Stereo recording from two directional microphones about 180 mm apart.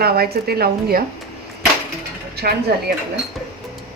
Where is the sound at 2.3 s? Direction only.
60° right (ahead or behind).